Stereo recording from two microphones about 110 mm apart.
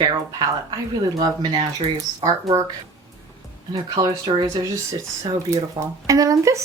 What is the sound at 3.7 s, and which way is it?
Speech, 35° right (ahead or behind).